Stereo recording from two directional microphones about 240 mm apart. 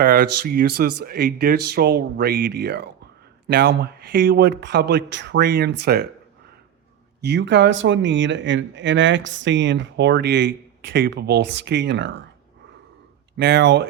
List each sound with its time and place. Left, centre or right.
0.0 s a man's voice: right
7.2 s speech: right
13.3 s speech: right